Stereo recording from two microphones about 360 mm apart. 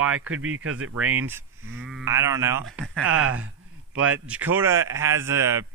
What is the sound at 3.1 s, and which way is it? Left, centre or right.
A man's voice, right.